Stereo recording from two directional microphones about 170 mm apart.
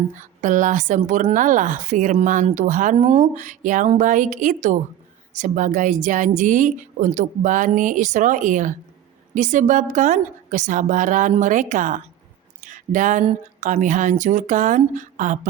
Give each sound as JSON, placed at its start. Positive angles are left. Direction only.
{"t": 0.1, "sound": "a woman's voice", "side_deg": -50}